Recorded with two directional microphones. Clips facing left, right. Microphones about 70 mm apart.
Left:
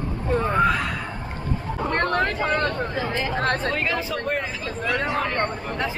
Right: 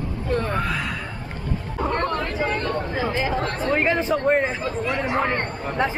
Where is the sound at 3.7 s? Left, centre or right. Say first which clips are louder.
Right 5 dB; right.